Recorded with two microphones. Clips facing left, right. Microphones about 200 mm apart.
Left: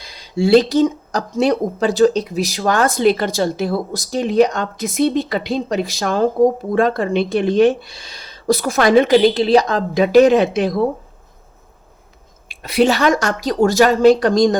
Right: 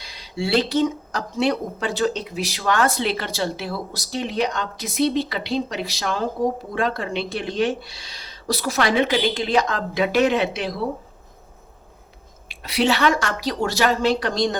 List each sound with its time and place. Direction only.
0.3 s speech: 40° left (ahead or behind)
12.5 s speech: 50° left (ahead or behind)